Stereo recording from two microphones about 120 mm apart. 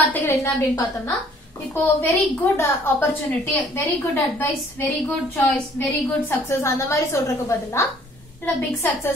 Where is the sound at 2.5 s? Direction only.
20° left (ahead or behind).